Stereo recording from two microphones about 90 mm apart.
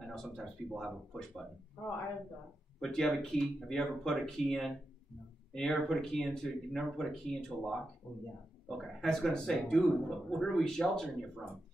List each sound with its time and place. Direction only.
0.0 s speech: 5° left (ahead or behind)
2.8 s speech: 5° left (ahead or behind)
8.0 s speech: 15° left (ahead or behind)
8.6 s speech: 5° left (ahead or behind)